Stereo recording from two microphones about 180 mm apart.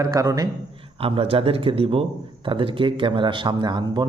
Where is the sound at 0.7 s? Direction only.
30° right (ahead or behind).